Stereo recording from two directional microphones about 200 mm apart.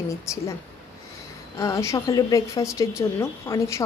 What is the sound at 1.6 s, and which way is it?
A woman's voice, 15° left (ahead or behind).